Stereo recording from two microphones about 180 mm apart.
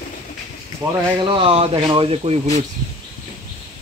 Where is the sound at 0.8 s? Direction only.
15° right (ahead or behind).